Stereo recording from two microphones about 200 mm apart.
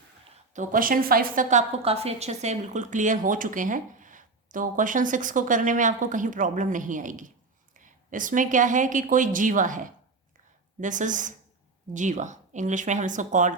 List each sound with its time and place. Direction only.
0.5 s a woman's voice: 40° right (ahead or behind)